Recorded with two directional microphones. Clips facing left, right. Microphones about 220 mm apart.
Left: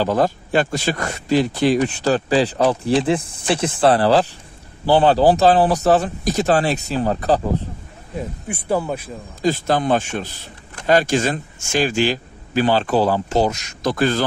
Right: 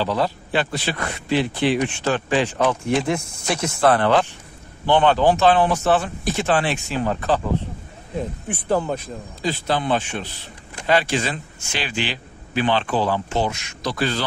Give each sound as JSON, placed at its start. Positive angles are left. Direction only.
{"t": 0.0, "sound": "speech", "side_deg": 45}
{"t": 8.2, "sound": "speech", "side_deg": 10}
{"t": 9.4, "sound": "speech", "side_deg": 45}